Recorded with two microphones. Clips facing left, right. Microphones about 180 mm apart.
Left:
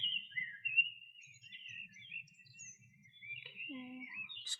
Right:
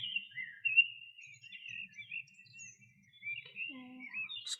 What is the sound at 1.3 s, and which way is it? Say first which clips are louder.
Bird: right 2 dB; 60° right (ahead or behind).